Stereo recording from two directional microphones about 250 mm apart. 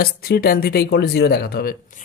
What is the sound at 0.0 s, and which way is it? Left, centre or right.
Speech, left.